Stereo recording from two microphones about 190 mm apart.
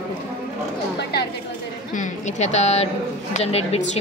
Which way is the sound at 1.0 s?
55° left (ahead or behind).